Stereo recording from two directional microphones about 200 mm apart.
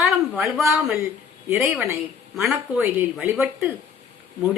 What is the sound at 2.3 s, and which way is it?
Speech, centre (ahead or behind).